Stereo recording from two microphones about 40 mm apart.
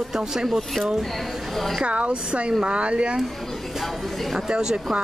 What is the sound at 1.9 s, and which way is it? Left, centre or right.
Speech, right.